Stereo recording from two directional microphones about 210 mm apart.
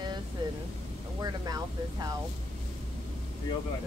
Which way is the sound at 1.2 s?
20° right (ahead or behind).